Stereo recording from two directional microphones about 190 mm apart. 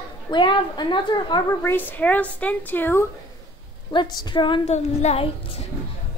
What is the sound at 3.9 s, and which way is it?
Speech, 25° left (ahead or behind).